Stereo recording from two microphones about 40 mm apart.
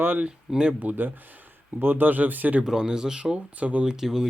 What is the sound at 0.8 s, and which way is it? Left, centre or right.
Speech, right.